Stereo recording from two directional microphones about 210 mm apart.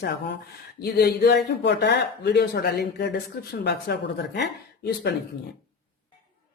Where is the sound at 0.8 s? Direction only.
50° left (ahead or behind).